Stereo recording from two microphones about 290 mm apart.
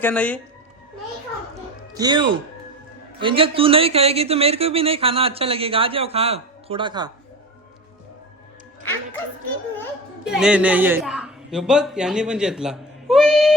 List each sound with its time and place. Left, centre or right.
0.0 s speech: centre
1.9 s speech: centre
10.2 s speech: centre